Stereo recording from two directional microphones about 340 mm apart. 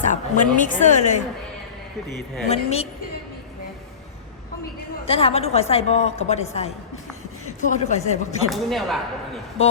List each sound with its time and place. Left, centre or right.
0.1 s a woman's voice: left
5.0 s a woman's voice: centre
8.4 s speech: centre